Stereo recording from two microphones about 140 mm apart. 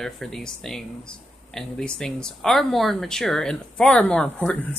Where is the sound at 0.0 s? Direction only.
5° left (ahead or behind).